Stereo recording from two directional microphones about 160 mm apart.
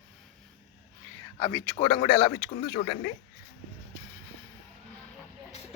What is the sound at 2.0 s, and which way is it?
Speech, 35° left (ahead or behind).